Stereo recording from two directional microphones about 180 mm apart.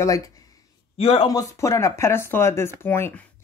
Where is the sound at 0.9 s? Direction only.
30° left (ahead or behind).